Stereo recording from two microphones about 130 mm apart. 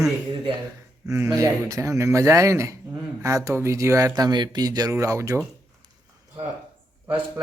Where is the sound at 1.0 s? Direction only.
20° right (ahead or behind).